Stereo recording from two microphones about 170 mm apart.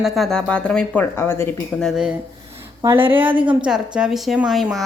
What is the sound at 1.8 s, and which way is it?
A woman's voice, 5° right (ahead or behind).